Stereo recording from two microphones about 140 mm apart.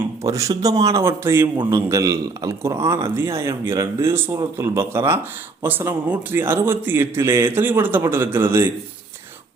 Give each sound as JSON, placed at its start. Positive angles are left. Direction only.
{"t": 0.2, "sound": "a man's voice", "side_deg": -25}